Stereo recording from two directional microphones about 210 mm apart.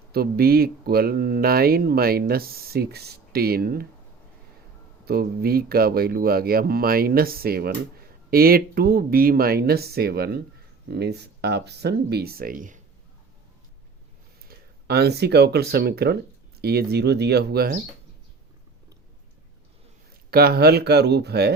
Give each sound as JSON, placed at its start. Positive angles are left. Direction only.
{"t": 0.1, "sound": "speech", "side_deg": -45}
{"t": 5.0, "sound": "speech", "side_deg": -45}
{"t": 14.4, "sound": "speech", "side_deg": -50}
{"t": 20.3, "sound": "speech", "side_deg": -45}